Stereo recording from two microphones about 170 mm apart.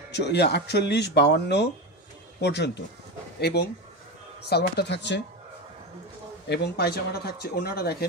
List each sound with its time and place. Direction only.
0.1 s speech: 85° left
3.3 s speech: 75° left (ahead or behind); by 5.2 s 90° left
6.5 s speech: 75° left (ahead or behind)